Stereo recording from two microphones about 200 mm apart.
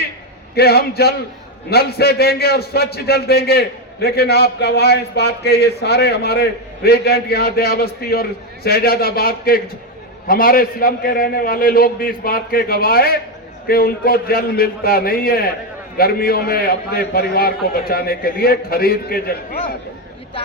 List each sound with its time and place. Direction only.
0.5 s a man's voice: 50° left (ahead or behind)